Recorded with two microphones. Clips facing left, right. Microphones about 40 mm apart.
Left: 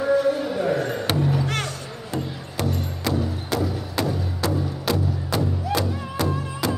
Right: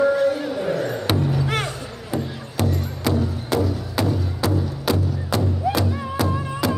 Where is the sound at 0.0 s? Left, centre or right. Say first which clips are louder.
Right 2 dB; centre.